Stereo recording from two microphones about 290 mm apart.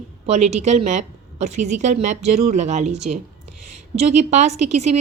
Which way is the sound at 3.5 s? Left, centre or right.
Right.